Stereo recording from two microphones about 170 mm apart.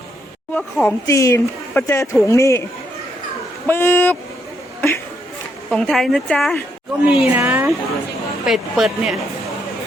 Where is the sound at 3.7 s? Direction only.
15° left (ahead or behind).